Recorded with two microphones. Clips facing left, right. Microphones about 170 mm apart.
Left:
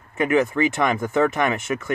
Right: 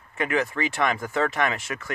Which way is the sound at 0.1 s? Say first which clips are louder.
Left 6 dB; 20° left (ahead or behind).